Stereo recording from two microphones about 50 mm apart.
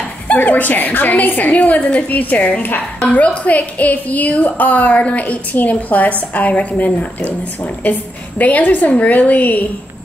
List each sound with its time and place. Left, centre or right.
0.3 s a woman's voice: left